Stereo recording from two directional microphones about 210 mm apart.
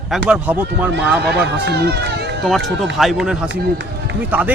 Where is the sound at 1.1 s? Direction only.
50° right (ahead or behind).